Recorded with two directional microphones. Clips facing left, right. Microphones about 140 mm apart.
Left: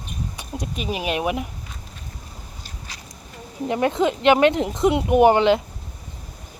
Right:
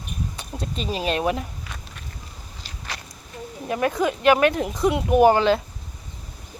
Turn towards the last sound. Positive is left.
turn(degrees=20)  # may be behind; listen again after turning